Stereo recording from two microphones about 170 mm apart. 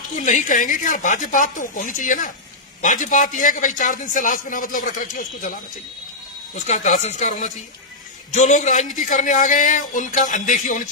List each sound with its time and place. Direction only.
0.1 s a man's voice: 50° left (ahead or behind)
6.5 s a man's voice: 45° left (ahead or behind)